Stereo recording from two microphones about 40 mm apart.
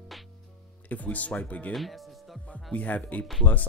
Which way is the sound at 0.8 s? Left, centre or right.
Left.